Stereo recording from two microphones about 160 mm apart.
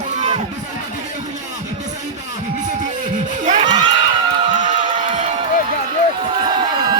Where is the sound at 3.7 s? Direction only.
25° right (ahead or behind).